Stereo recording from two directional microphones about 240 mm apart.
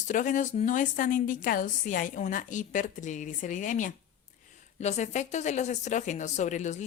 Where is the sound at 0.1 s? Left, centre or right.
Left.